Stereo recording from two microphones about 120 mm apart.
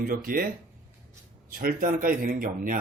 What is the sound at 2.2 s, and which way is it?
Speech, 90° right.